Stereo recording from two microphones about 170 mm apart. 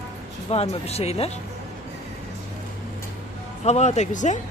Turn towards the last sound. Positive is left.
turn(degrees=45)  # may be behind; listen again after turning